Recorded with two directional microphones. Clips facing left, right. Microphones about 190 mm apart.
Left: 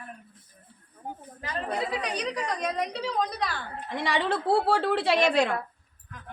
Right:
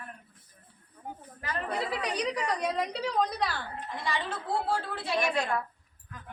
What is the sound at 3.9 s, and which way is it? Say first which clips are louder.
A woman's voice: left 8 dB; 75° left (ahead or behind).